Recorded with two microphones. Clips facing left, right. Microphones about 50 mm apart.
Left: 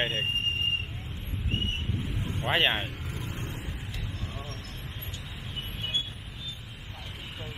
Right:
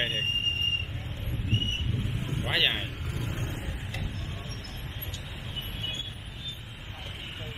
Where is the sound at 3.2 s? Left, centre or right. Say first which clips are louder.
Right 2 dB; right.